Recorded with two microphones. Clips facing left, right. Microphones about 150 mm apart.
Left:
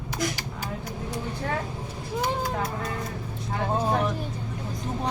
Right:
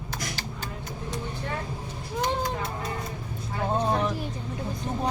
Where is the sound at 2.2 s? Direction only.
5° left (ahead or behind).